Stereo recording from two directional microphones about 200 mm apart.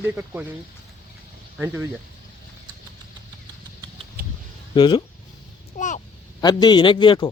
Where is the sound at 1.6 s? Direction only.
10° right (ahead or behind).